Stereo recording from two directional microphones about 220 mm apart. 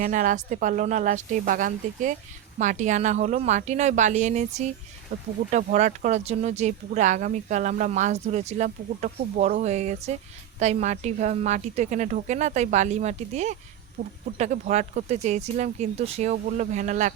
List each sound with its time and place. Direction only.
0.0 s speech: 35° right (ahead or behind)